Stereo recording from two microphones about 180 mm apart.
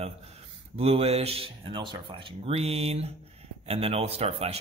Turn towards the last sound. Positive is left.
turn(degrees=-35)  # may be behind; listen again after turning